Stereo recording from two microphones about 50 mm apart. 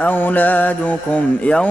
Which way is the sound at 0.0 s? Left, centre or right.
Left.